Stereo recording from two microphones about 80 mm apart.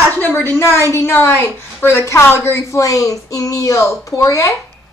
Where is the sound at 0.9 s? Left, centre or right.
Left.